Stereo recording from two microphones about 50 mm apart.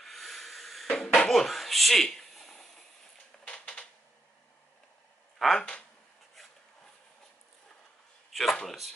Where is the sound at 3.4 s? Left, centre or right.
Left.